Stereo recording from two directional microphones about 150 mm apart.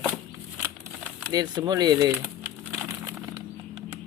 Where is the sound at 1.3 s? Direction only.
25° right (ahead or behind).